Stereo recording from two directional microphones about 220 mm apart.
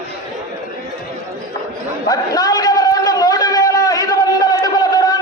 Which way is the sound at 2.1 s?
15° left (ahead or behind).